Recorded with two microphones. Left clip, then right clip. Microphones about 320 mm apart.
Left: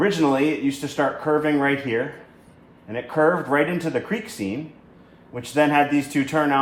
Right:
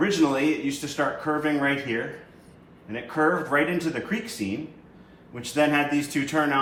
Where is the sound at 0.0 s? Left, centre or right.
Left.